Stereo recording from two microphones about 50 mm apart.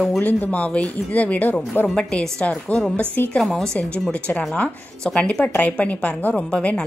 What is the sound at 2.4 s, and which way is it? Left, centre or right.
Speech, left.